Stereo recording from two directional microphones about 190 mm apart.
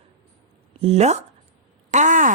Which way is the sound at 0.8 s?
35° right (ahead or behind).